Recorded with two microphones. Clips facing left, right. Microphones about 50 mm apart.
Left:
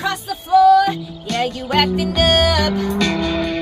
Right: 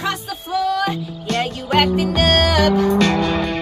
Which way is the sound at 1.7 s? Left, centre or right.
Centre.